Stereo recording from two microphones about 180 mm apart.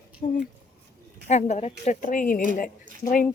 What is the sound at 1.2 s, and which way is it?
A woman's voice, 40° left (ahead or behind).